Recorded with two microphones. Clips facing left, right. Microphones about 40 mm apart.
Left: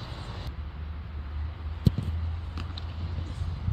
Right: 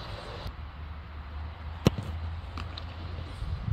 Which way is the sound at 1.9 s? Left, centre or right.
Right.